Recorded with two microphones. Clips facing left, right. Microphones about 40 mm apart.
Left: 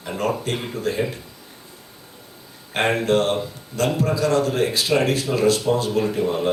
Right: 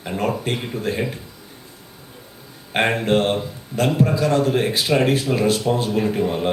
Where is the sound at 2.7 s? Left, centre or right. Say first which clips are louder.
Right 1 dB; right.